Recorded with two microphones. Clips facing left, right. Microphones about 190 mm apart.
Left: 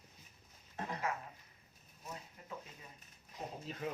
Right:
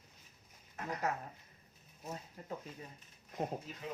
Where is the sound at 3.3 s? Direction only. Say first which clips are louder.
Right 7 dB; 55° right (ahead or behind).